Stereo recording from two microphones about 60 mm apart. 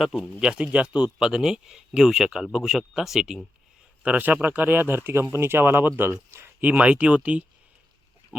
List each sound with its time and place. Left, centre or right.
0.0 s speech: centre
4.0 s speech: right
6.6 s speech: right
8.3 s pig: right